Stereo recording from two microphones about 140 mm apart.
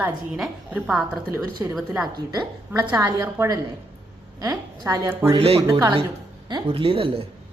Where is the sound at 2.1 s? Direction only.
30° right (ahead or behind).